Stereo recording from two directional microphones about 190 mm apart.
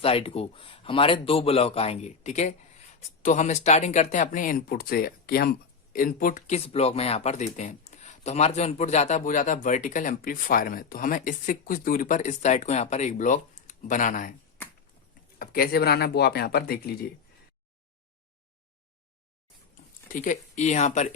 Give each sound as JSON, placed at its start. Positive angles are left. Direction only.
{"t": 0.0, "sound": "speech", "side_deg": 30}
{"t": 15.4, "sound": "speech", "side_deg": 55}
{"t": 20.1, "sound": "speech", "side_deg": 45}